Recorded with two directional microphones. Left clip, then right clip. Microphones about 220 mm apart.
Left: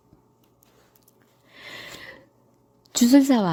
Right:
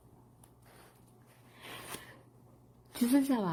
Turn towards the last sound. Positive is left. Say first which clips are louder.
# left 12 dB
turn(degrees=50)  # may be behind; listen again after turning